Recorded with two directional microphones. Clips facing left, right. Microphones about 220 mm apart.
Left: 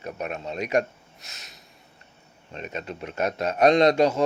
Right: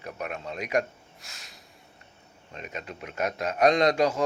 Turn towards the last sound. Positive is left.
turn(degrees=25)  # may be behind; listen again after turning